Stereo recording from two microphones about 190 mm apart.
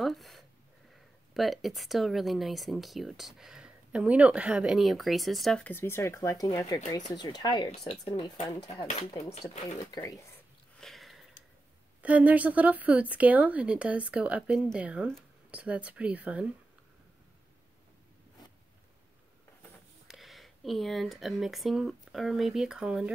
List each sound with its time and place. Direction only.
0.0 s a sound: centre (ahead or behind)
1.3 s speech: centre (ahead or behind); by 10.2 s 20° left (ahead or behind)
10.8 s sniff: centre (ahead or behind)
12.0 s speech: 10° right (ahead or behind)
20.1 s speech: centre (ahead or behind)